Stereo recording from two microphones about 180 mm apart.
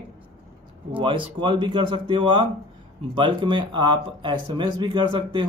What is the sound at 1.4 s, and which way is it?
Speech, 25° right (ahead or behind).